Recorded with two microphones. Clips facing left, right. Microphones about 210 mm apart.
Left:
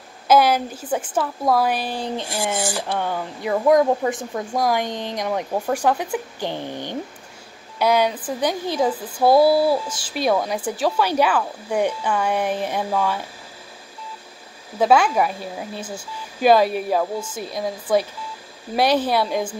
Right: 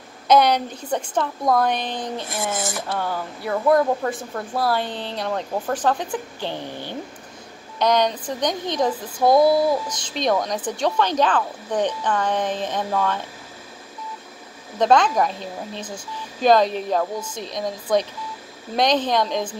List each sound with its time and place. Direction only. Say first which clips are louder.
0.3 s speech: even; 5° left (ahead or behind)
2.2 s speech: left 2 dB; 30° left (ahead or behind)
2.9 s speech: left 1 dB; 15° left (ahead or behind)
14.8 s speech: left 1 dB; 5° left (ahead or behind)